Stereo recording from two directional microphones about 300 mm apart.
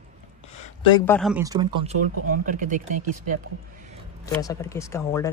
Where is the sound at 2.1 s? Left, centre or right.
Right.